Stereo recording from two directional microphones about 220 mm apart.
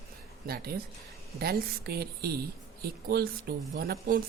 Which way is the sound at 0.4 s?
45° right (ahead or behind).